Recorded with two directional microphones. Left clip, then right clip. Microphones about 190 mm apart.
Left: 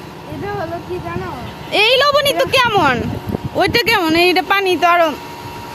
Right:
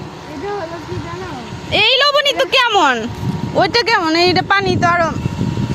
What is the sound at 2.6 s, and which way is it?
Speech, 15° right (ahead or behind).